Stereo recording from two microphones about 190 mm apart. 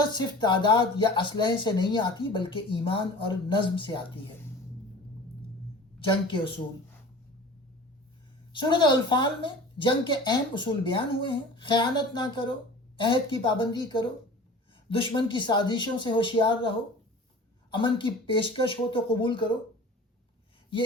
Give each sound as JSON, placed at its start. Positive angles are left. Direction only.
{"t": 0.0, "sound": "speech", "side_deg": 25}
{"t": 6.0, "sound": "speech", "side_deg": 25}
{"t": 8.5, "sound": "speech", "side_deg": 25}